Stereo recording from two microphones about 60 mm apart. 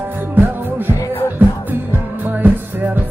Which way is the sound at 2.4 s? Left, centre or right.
Right.